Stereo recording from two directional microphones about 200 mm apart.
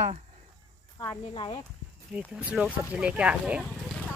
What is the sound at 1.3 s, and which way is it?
Speech, 25° left (ahead or behind).